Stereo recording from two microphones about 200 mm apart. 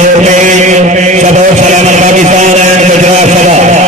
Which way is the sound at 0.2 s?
35° right (ahead or behind).